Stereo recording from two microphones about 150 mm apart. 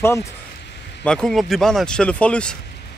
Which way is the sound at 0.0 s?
20° left (ahead or behind).